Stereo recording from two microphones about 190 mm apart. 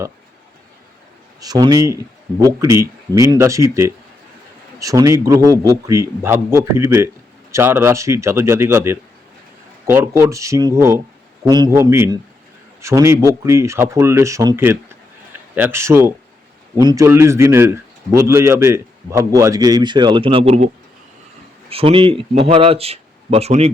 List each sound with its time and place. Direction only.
1.4 s a man's voice: 20° right (ahead or behind)
21.7 s speech: 30° right (ahead or behind)